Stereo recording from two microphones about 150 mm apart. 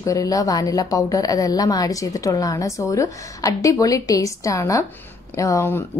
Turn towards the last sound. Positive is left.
turn(degrees=15)  # may be behind; listen again after turning